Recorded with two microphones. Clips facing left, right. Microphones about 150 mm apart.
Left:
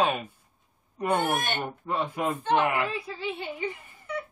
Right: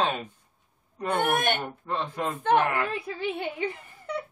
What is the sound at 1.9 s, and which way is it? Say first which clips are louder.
A man's voice: left 2 dB; 10° left (ahead or behind).